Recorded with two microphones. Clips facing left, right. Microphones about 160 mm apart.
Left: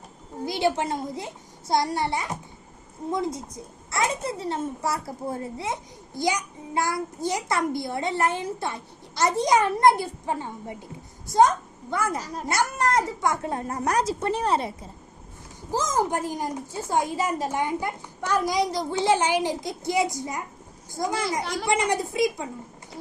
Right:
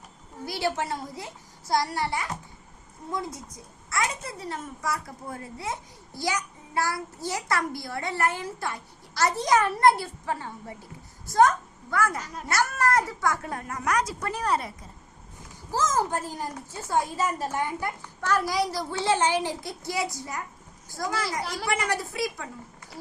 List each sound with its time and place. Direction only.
0.4 s a child's voice: 20° left (ahead or behind)
12.1 s a child's voice: 35° left (ahead or behind)
12.5 s a child's voice: 20° left (ahead or behind)
15.7 s a woman's voice: 15° left (ahead or behind)